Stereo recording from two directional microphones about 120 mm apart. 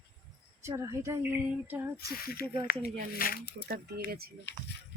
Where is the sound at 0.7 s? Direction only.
25° right (ahead or behind).